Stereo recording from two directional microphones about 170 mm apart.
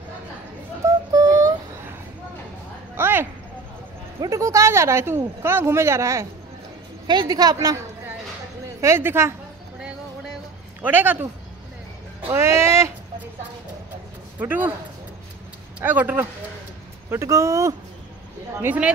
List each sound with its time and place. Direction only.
0.8 s child singing: 20° right (ahead or behind)
3.0 s a sound: 10° right (ahead or behind)
4.2 s a woman's voice: 20° right (ahead or behind)
8.8 s a woman's voice: 15° right (ahead or behind)
10.8 s a woman's voice: 10° right (ahead or behind)
12.3 s a woman's voice: 15° right (ahead or behind)
14.4 s a woman's voice: 10° right (ahead or behind)
15.8 s a woman's voice: 10° right (ahead or behind)